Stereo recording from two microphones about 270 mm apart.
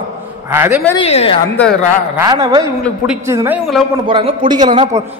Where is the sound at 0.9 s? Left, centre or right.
Left.